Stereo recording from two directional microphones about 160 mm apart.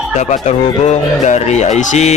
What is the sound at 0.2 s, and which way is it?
Speech, 45° left (ahead or behind).